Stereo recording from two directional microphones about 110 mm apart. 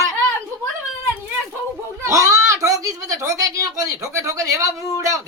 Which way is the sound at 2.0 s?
25° right (ahead or behind).